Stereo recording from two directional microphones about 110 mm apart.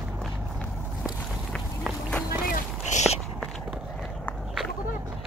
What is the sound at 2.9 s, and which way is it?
Walk, 90° left.